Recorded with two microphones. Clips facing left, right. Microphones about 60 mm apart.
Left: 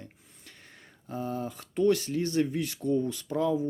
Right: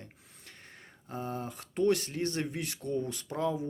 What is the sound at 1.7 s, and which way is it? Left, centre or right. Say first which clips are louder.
Speech: left 3 dB; right.